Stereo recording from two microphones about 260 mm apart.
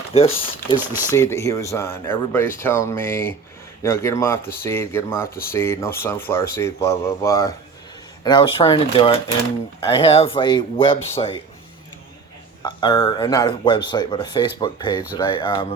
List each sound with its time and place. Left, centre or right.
0.1 s speech: left
0.8 s speech: centre
1.1 s speech: centre
12.6 s speech: centre